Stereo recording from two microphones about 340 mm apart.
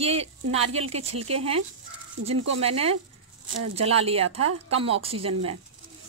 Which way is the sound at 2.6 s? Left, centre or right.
Centre.